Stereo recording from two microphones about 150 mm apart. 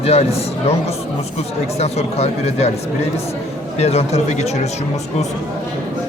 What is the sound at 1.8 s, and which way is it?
Speech, 45° left (ahead or behind).